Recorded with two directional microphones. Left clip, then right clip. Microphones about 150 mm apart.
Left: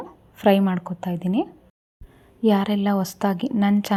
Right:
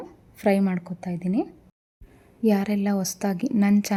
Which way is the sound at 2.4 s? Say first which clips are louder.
Left 3 dB; 20° right (ahead or behind).